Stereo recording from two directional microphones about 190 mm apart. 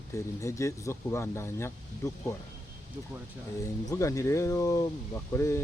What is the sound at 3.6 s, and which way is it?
Speech, 15° left (ahead or behind).